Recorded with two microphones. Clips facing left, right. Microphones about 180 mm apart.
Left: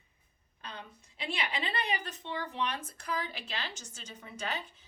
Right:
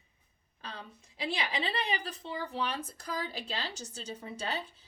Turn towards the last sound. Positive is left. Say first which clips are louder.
# right 2 dB
turn(degrees=-35)  # may be behind; listen again after turning